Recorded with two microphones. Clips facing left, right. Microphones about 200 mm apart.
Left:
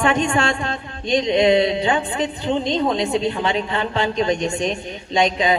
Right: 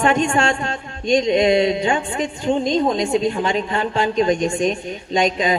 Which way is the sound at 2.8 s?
40° right (ahead or behind).